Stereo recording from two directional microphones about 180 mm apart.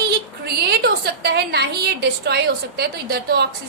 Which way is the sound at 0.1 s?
60° right (ahead or behind).